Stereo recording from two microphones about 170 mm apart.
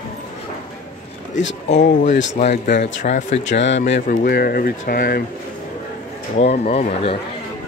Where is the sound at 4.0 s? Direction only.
60° left (ahead or behind).